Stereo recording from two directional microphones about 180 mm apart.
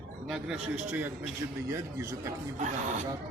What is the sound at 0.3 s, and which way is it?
A man's voice, 5° right (ahead or behind).